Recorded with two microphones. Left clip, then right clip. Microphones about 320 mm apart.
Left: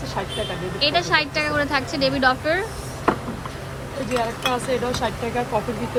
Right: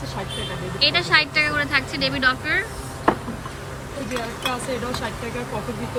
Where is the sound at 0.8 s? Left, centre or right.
Centre.